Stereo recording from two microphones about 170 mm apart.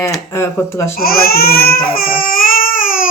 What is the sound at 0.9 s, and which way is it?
Baby cry, 60° left (ahead or behind).